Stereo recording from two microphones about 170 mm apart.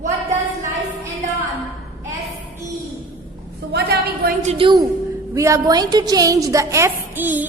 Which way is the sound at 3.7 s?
70° right (ahead or behind).